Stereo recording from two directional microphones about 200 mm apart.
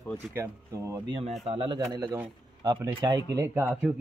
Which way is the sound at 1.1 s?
30° right (ahead or behind).